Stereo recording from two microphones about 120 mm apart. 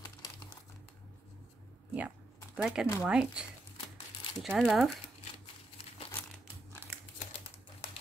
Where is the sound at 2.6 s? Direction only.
5° right (ahead or behind).